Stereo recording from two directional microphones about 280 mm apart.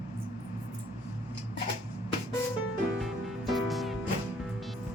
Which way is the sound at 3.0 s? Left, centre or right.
Centre.